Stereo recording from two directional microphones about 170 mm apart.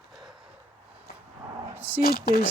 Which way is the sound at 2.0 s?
65° left (ahead or behind).